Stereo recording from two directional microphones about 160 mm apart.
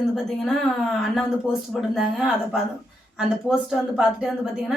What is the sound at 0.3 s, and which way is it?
A woman's voice, centre (ahead or behind).